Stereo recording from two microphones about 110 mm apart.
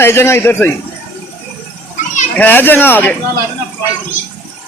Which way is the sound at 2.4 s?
15° left (ahead or behind).